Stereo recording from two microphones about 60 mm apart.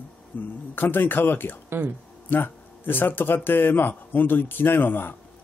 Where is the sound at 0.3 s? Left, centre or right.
Left.